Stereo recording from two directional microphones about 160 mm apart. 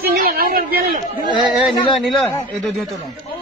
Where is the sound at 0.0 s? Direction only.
70° right (ahead or behind).